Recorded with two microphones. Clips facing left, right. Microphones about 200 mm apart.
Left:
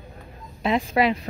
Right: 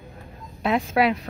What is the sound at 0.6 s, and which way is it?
Speech, centre (ahead or behind).